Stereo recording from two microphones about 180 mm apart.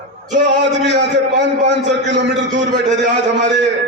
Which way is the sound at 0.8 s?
75° right (ahead or behind).